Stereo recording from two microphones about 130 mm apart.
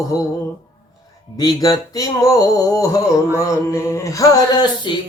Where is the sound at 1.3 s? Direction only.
30° left (ahead or behind).